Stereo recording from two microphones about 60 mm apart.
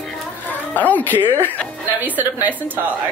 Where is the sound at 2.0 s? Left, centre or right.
Right.